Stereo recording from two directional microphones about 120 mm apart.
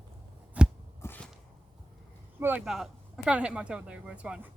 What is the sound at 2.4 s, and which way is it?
Speech, 15° right (ahead or behind).